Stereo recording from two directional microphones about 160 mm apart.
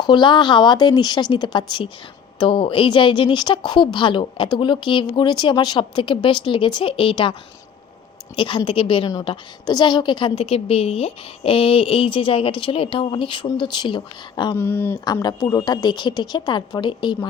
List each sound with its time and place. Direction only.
0.0 s a woman's voice: 30° left (ahead or behind)
8.4 s a woman's voice: 30° left (ahead or behind)
14.5 s speech: 15° left (ahead or behind)
15.0 s a woman's voice: 25° left (ahead or behind)